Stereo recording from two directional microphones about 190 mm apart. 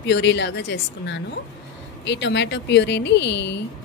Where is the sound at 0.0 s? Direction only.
70° left (ahead or behind).